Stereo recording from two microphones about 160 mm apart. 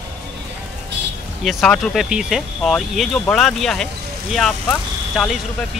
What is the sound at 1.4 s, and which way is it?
Speech, centre (ahead or behind).